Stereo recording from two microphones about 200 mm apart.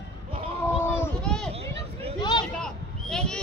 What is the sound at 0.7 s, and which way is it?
Children playing, 10° left (ahead or behind).